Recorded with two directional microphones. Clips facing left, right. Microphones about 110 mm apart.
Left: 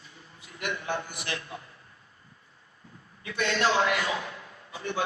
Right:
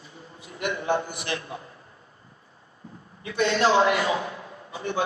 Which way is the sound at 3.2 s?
25° right (ahead or behind).